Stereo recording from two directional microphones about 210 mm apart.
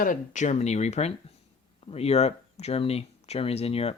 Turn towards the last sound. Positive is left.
turn(degrees=30)  # may be behind; listen again after turning